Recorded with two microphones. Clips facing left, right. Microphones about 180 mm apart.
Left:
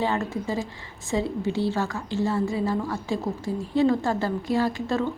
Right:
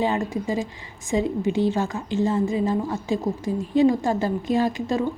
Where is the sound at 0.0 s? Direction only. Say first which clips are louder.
Right 2 dB; 15° right (ahead or behind).